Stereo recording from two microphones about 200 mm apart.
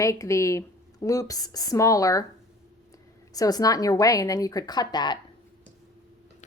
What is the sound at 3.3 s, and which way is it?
A woman's voice, 20° left (ahead or behind).